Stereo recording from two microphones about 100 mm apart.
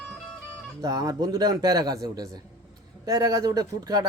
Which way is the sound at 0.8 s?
45° right (ahead or behind).